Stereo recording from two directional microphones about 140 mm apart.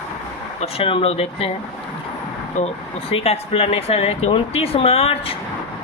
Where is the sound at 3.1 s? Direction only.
45° left (ahead or behind).